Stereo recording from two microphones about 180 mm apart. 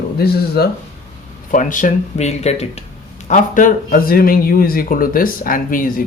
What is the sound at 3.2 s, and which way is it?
Speech, 45° left (ahead or behind).